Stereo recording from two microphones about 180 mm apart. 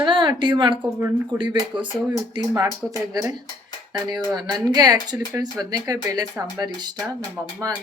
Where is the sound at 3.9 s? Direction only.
25° right (ahead or behind).